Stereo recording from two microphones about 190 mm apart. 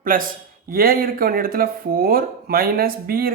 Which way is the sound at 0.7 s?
50° right (ahead or behind).